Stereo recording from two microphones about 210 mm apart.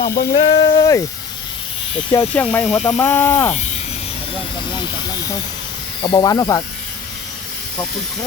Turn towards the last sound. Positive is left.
turn(degrees=15)  # may be behind; listen again after turning